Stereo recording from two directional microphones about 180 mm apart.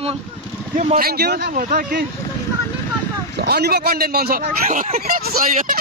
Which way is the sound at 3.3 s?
65° right (ahead or behind).